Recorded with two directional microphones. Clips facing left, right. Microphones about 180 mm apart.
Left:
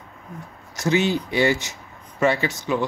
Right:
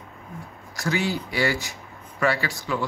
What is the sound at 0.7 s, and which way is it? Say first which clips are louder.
Speech: left 5 dB; 20° left (ahead or behind).